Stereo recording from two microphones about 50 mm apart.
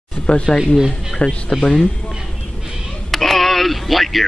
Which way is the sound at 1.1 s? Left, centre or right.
Centre.